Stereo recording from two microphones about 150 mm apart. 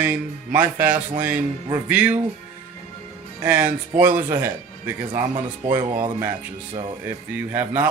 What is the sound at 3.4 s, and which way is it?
Speech, 10° right (ahead or behind).